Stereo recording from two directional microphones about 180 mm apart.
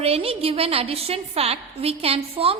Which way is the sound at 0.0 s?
35° right (ahead or behind).